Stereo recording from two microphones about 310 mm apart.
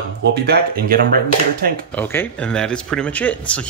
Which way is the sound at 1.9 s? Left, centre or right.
Centre.